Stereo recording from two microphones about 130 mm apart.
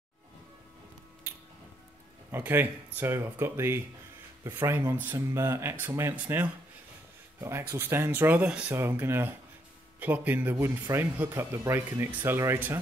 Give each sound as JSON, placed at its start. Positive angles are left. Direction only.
{"t": 2.3, "sound": "speech", "side_deg": -15}